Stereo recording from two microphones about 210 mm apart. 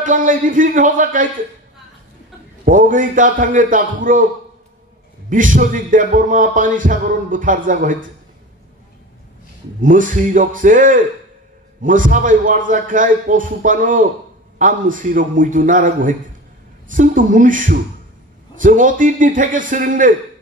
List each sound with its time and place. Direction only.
0.0 s speech: 40° right (ahead or behind)
2.6 s speech: 40° right (ahead or behind)
5.3 s speech: 40° right (ahead or behind)
9.8 s speech: 40° right (ahead or behind)